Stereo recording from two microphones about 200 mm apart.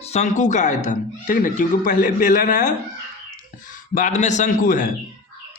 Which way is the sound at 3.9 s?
40° left (ahead or behind).